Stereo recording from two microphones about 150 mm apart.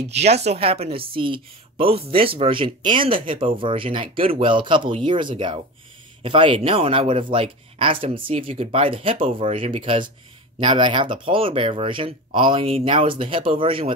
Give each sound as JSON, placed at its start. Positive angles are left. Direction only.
{"t": 0.2, "sound": "speech", "side_deg": -45}